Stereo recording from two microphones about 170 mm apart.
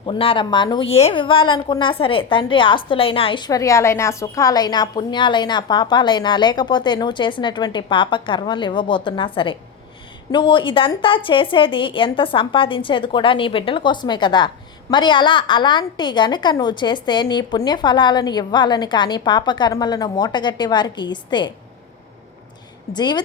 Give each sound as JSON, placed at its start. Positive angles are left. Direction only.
{"t": 0.0, "sound": "a woman's voice", "side_deg": 30}
{"t": 22.9, "sound": "a woman's voice", "side_deg": 25}